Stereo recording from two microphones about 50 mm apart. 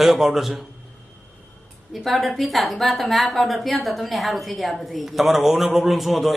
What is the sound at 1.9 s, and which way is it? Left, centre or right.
A woman's voice, centre.